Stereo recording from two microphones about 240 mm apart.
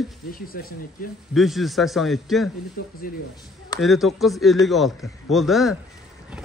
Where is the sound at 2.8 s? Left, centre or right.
Left.